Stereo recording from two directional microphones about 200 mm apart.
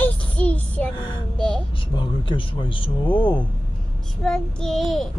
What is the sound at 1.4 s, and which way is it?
Child singing, 5° left (ahead or behind).